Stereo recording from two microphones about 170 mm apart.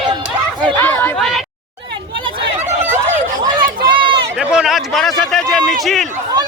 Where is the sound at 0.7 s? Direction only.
10° left (ahead or behind).